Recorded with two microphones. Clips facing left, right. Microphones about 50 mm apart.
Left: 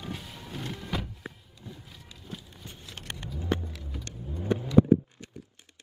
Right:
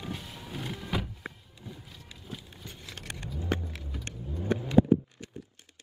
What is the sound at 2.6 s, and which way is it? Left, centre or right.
Vehicle, right.